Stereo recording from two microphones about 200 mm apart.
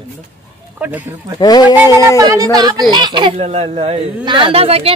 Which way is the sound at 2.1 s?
15° right (ahead or behind).